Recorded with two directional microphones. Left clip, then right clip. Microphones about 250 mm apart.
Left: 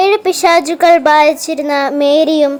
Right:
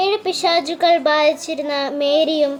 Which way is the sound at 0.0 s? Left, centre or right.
Centre.